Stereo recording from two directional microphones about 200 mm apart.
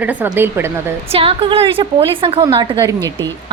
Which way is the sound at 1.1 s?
25° right (ahead or behind).